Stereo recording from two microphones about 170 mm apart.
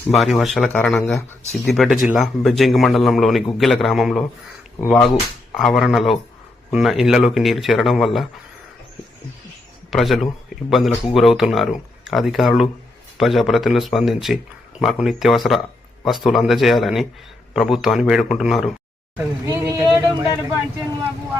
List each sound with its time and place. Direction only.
0.2 s speech: centre (ahead or behind)
9.9 s speech: centre (ahead or behind)
19.1 s speech: 15° right (ahead or behind)
19.8 s a sound: 20° right (ahead or behind)